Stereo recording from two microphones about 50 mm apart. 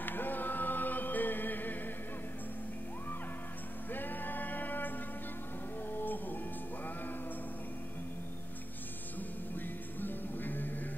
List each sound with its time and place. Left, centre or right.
0.0 s music: left
3.9 s a sound: left
5.9 s music: left
9.6 s music: left